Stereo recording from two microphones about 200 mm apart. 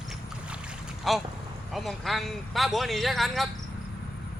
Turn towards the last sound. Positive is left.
turn(degrees=0)  # may be behind; listen again after turning